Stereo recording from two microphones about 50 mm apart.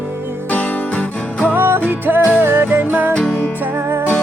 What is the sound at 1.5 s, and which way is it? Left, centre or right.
Music, right.